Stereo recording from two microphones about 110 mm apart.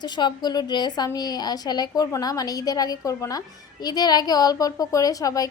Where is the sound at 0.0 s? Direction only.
40° left (ahead or behind).